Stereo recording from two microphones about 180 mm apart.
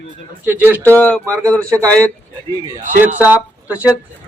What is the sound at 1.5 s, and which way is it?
Speech, 15° right (ahead or behind).